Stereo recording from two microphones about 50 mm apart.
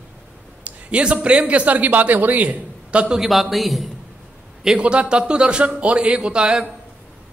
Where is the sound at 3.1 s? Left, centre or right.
Centre.